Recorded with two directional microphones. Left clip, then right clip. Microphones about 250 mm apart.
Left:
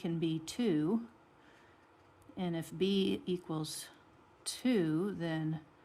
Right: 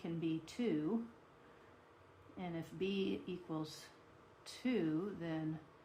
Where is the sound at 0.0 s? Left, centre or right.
Left.